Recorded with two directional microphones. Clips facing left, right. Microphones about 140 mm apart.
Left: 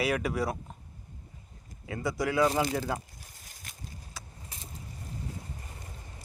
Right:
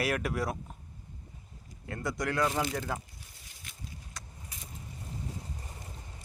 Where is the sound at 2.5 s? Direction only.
35° left (ahead or behind).